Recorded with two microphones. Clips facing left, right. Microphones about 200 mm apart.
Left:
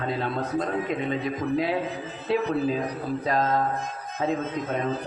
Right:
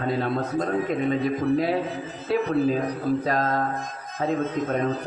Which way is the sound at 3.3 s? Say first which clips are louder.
Even; 40° right (ahead or behind).